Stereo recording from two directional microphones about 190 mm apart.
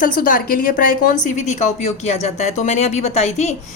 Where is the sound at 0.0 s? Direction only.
45° left (ahead or behind).